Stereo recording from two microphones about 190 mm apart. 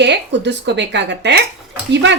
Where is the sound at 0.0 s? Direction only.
65° right (ahead or behind).